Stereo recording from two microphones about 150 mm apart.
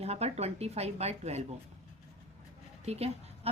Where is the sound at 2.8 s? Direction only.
45° right (ahead or behind).